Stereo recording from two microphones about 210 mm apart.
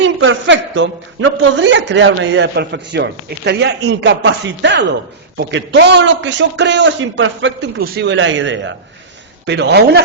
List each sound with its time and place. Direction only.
0.0 s a woman's voice: 65° right (ahead or behind)
7.8 s a woman's voice: 55° right (ahead or behind)